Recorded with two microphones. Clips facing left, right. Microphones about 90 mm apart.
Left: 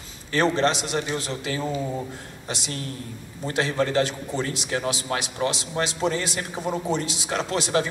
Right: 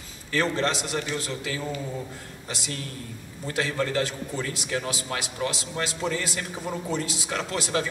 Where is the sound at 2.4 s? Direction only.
20° left (ahead or behind).